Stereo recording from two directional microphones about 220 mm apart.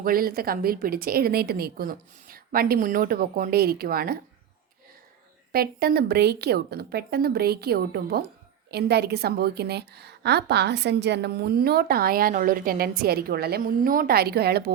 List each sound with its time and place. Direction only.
0.0 s a woman's voice: 40° right (ahead or behind)
5.5 s a woman's voice: 45° right (ahead or behind)